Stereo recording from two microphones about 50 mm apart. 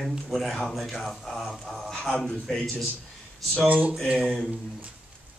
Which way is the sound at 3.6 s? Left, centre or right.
Right.